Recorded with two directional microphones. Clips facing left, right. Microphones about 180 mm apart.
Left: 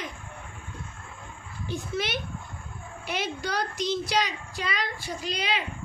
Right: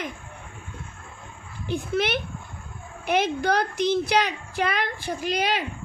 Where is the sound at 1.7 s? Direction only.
55° right (ahead or behind).